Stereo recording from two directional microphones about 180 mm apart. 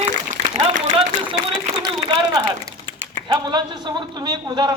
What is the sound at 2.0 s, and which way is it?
Speech, 20° right (ahead or behind).